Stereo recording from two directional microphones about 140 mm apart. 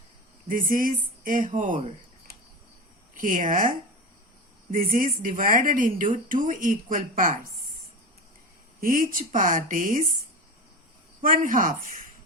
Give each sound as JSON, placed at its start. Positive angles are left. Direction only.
{"t": 0.4, "sound": "a woman's voice", "side_deg": -75}
{"t": 3.2, "sound": "a woman's voice", "side_deg": -70}
{"t": 8.8, "sound": "a woman's voice", "side_deg": -85}
{"t": 11.2, "sound": "a woman's voice", "side_deg": -75}